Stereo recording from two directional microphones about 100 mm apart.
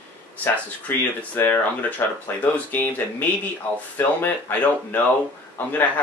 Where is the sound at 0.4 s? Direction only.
15° left (ahead or behind).